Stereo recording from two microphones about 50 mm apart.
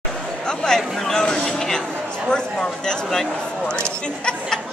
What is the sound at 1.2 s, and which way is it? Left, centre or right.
Speech, centre.